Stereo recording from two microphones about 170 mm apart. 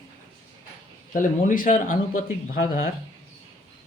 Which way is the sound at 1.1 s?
50° left (ahead or behind).